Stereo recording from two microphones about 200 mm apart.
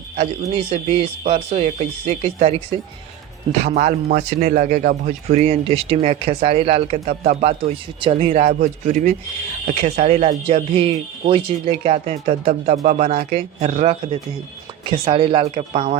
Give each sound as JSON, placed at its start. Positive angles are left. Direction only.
{"t": 0.5, "sound": "speech", "side_deg": -30}